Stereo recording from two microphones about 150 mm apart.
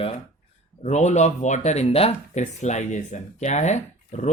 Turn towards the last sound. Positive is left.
turn(degrees=50)  # may be behind; listen again after turning